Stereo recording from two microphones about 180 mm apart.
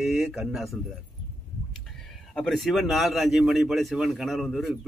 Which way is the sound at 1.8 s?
Centre (ahead or behind).